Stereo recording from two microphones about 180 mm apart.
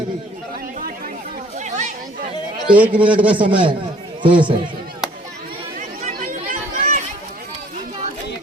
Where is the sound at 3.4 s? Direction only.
25° right (ahead or behind).